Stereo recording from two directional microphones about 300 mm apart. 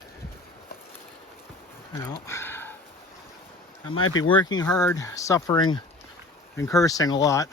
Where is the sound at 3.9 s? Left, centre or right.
Left.